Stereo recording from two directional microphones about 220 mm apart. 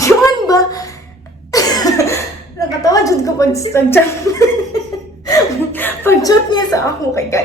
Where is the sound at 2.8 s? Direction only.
15° left (ahead or behind).